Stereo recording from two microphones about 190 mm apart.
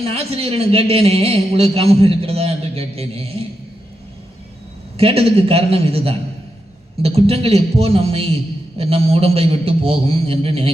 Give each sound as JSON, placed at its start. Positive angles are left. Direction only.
{"t": 0.0, "sound": "a man's voice", "side_deg": -30}
{"t": 4.9, "sound": "a man's voice", "side_deg": -30}